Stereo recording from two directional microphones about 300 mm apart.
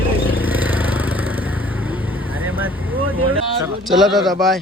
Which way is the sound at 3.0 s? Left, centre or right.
Right.